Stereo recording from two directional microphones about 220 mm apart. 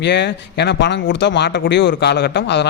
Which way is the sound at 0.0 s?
50° left (ahead or behind).